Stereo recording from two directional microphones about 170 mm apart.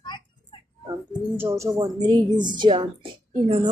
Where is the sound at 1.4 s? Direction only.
20° right (ahead or behind).